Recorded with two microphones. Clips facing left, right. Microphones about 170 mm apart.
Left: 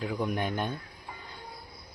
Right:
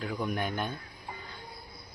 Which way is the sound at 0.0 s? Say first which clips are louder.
Left 2 dB; 15° left (ahead or behind).